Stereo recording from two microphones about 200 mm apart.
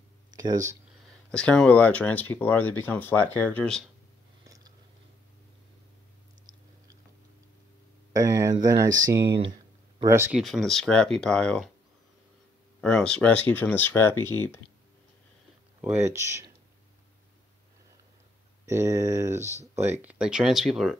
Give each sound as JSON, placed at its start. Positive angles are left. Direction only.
{"t": 0.3, "sound": "a sound", "side_deg": -20}
{"t": 1.3, "sound": "speech", "side_deg": 5}
{"t": 6.5, "sound": "chewing", "side_deg": -20}
{"t": 8.1, "sound": "speech", "side_deg": -15}
{"t": 10.4, "sound": "speech", "side_deg": 0}
{"t": 12.8, "sound": "speech", "side_deg": 5}
{"t": 15.8, "sound": "speech", "side_deg": -10}
{"t": 18.7, "sound": "speech", "side_deg": -15}